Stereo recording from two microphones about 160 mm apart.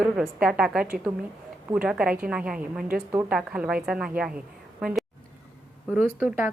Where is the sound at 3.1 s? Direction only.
15° right (ahead or behind).